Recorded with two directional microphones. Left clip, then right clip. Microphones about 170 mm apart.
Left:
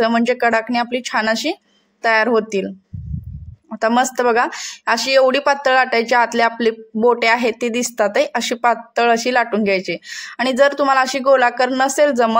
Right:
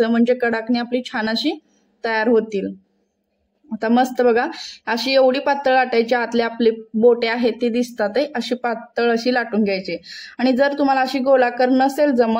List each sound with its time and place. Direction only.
0.0 s speech: 20° left (ahead or behind)
3.8 s speech: 20° left (ahead or behind)